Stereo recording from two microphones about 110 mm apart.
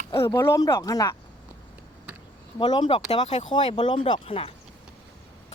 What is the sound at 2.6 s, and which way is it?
Speech, 45° left (ahead or behind).